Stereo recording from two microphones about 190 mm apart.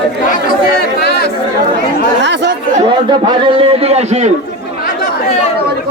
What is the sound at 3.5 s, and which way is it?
Speech, 30° right (ahead or behind).